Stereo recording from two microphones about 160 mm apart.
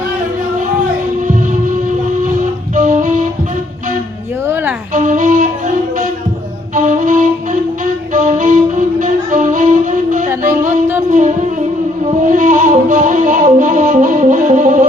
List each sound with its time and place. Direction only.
2.7 s music: 50° right (ahead or behind)
4.4 s music: 15° right (ahead or behind)
4.9 s music: 50° right (ahead or behind)
6.7 s music: 50° right (ahead or behind)
10.2 s music: 15° right (ahead or behind)
12.3 s music: 55° right (ahead or behind)